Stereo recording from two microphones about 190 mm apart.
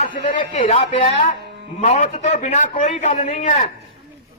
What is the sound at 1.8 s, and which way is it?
A man's voice, 40° left (ahead or behind).